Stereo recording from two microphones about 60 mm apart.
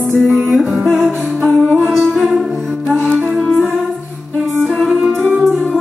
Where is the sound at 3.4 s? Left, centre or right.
Centre.